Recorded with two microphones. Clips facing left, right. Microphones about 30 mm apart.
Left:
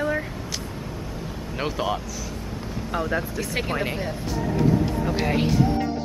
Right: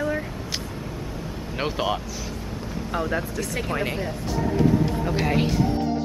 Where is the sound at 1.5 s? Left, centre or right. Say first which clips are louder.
Right 1 dB; centre.